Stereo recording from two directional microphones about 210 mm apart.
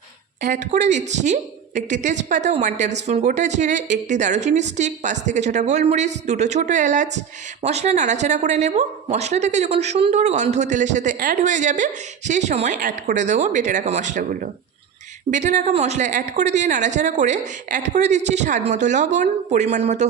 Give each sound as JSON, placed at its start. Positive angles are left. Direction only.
{"t": 0.4, "sound": "speech", "side_deg": -35}